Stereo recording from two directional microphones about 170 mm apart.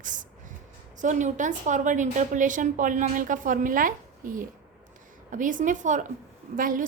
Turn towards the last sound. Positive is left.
turn(degrees=-55)  # may be behind; listen again after turning